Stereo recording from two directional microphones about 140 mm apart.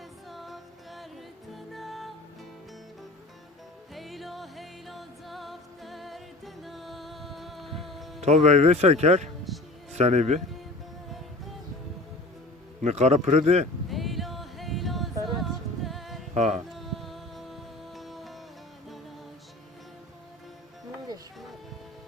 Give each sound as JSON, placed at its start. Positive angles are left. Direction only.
{"t": 0.3, "sound": "music", "side_deg": 0}
{"t": 3.9, "sound": "music", "side_deg": 0}
{"t": 8.2, "sound": "speech", "side_deg": -50}
{"t": 12.8, "sound": "speech", "side_deg": -50}
{"t": 13.9, "sound": "music", "side_deg": 0}
{"t": 16.3, "sound": "speech", "side_deg": -55}
{"t": 16.7, "sound": "music", "side_deg": 0}